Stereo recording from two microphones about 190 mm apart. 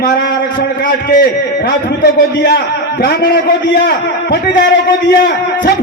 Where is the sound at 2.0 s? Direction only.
55° left (ahead or behind).